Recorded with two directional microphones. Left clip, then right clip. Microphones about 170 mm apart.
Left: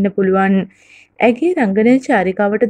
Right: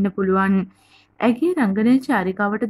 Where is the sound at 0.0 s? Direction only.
15° left (ahead or behind).